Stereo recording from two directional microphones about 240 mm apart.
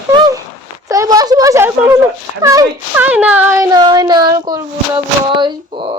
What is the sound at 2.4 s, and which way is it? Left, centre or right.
Speech, centre.